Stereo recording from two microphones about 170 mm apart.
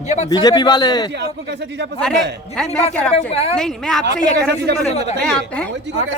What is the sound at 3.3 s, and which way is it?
Speech, 35° left (ahead or behind).